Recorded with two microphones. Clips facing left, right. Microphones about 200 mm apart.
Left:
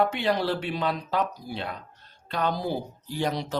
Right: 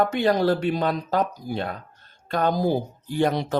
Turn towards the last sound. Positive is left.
turn(degrees=-55)  # may be behind; listen again after turning